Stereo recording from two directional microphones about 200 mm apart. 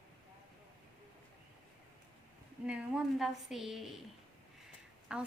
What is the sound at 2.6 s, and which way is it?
A woman's voice, 5° right (ahead or behind).